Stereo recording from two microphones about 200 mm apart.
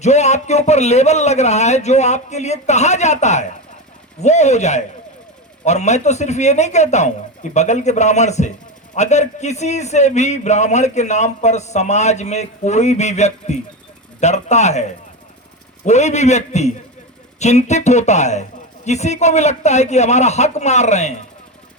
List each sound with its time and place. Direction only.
0.0 s a man's voice: 35° left (ahead or behind)